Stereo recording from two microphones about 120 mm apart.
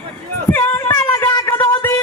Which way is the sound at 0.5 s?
20° left (ahead or behind).